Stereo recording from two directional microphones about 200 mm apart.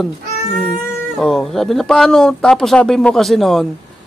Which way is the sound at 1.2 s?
Centre (ahead or behind).